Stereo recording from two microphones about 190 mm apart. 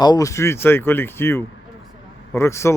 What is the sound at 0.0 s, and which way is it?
Speech, 20° left (ahead or behind).